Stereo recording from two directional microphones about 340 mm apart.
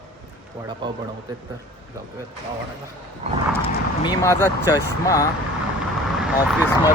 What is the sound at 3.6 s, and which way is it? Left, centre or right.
Speech, centre.